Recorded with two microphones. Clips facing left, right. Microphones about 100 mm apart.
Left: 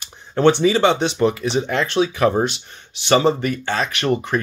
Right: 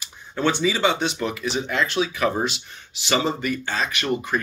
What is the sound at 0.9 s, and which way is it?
Speech, 40° left (ahead or behind).